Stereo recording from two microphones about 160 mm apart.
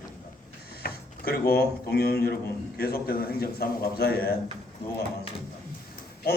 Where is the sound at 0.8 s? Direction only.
75° left (ahead or behind).